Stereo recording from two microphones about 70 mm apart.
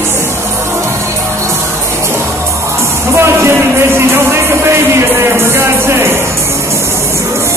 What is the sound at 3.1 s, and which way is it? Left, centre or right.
Music, right.